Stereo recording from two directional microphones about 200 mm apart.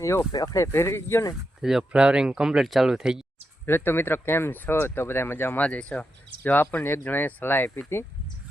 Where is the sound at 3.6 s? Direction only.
10° left (ahead or behind).